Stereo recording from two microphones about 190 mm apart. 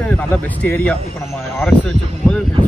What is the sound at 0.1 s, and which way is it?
Speech, 10° left (ahead or behind).